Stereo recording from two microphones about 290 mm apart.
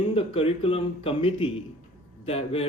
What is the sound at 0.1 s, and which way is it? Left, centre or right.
A man's voice, centre.